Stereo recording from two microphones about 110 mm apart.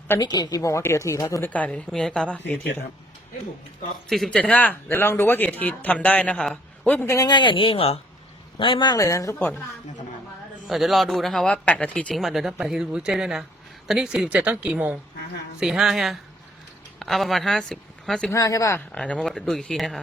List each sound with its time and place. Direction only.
0.2 s speech: 40° left (ahead or behind)
1.5 s speech: 15° left (ahead or behind)
4.1 s speech: 5° left (ahead or behind); by 7.3 s 20° left (ahead or behind)
7.3 s speech: 45° left (ahead or behind)
9.0 s speech: 30° left (ahead or behind)
10.7 s speech: centre (ahead or behind)
12.1 s a woman's voice: centre (ahead or behind)
18.3 s speech: 30° left (ahead or behind)
18.9 s speech: 10° left (ahead or behind)